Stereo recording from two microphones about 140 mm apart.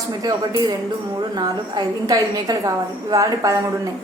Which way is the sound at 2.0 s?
25° right (ahead or behind).